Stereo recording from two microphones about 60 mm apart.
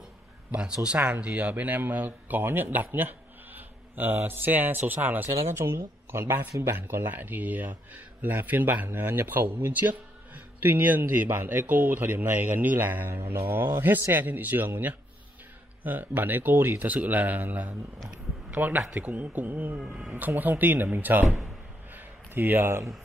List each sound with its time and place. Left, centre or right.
0.7 s a man's voice: centre
5.5 s speech: right
13.1 s speech: right
15.8 s speech: right
21.9 s a sound: right